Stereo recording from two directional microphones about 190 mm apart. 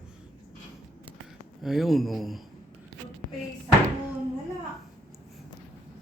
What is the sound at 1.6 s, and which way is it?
Speech, centre (ahead or behind).